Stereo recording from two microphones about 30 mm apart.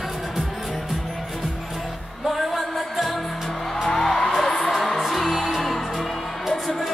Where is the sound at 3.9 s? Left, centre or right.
Centre.